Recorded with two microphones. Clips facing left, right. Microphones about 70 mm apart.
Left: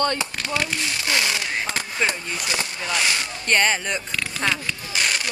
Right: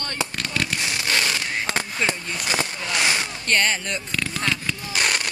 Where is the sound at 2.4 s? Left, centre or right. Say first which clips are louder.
Right 3 dB; right.